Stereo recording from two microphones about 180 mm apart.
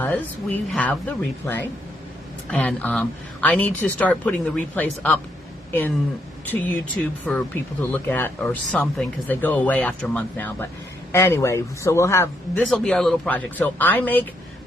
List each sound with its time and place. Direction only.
0.0 s speech: 10° left (ahead or behind)
6.4 s speech: 10° left (ahead or behind)
12.7 s speech: 5° left (ahead or behind)